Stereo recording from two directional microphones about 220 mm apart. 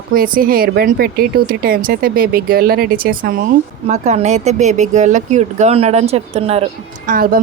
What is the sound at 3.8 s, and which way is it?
Speech, 30° right (ahead or behind).